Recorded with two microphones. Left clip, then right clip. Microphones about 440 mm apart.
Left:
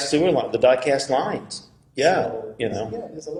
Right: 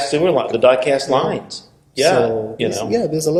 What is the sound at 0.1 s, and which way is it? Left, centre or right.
A man's voice, left.